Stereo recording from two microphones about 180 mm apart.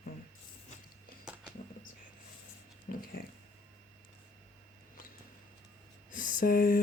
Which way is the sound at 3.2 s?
55° left (ahead or behind).